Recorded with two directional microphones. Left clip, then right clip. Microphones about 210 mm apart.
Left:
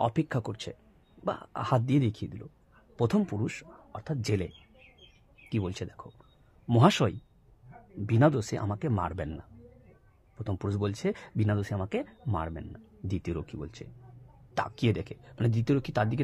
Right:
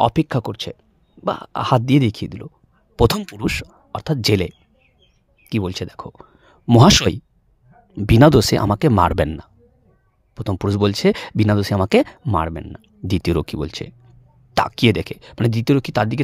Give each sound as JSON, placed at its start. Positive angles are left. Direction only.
{"t": 0.0, "sound": "speech", "side_deg": -40}
{"t": 5.5, "sound": "speech", "side_deg": -35}
{"t": 10.3, "sound": "speech", "side_deg": -40}